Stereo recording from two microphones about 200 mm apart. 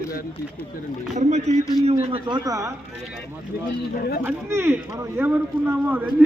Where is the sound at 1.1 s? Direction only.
35° right (ahead or behind); by 2.7 s 15° right (ahead or behind).